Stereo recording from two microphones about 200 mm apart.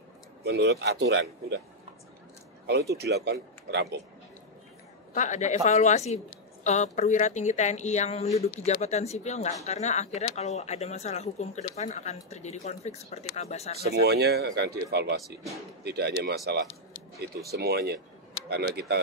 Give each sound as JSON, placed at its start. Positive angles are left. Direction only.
{"t": 0.4, "sound": "speech", "side_deg": -55}
{"t": 3.0, "sound": "speech", "side_deg": -55}
{"t": 5.1, "sound": "a woman's voice", "side_deg": 35}
{"t": 13.8, "sound": "speech", "side_deg": -55}